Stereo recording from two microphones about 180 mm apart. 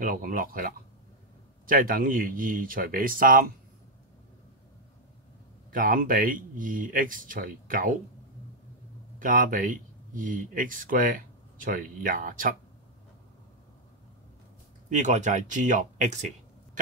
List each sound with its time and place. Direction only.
0.0 s speech: 50° right (ahead or behind)
5.7 s speech: 50° right (ahead or behind)
9.2 s speech: 50° right (ahead or behind)
14.9 s speech: 40° right (ahead or behind)